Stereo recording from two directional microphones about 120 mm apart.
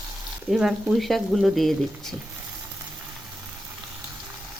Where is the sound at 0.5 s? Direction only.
5° right (ahead or behind).